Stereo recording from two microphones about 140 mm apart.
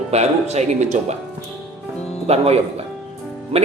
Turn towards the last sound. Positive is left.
turn(degrees=-45)  # may be behind; listen again after turning